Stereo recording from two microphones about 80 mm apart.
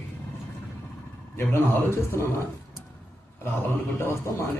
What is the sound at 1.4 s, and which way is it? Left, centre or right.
Speech, left.